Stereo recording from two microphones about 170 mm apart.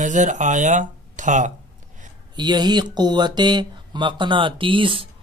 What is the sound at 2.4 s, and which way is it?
Speech, 25° right (ahead or behind).